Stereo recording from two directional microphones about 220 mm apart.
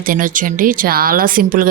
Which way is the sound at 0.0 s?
40° right (ahead or behind).